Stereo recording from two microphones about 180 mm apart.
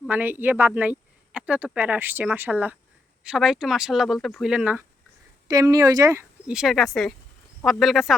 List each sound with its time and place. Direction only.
0.1 s speech: 10° right (ahead or behind)
5.5 s speech: 20° right (ahead or behind)
6.5 s speech: centre (ahead or behind)